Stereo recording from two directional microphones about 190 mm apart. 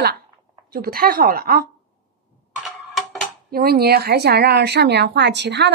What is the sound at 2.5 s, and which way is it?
Tick-tock, centre (ahead or behind).